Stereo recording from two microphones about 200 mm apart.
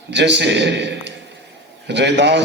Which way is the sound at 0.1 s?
60° right (ahead or behind).